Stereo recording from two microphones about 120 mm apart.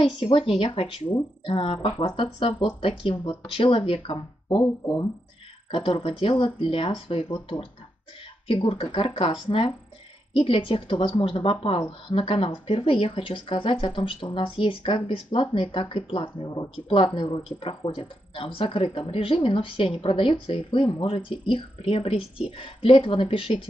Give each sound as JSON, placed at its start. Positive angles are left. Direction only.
{"t": 0.2, "sound": "speech", "side_deg": 50}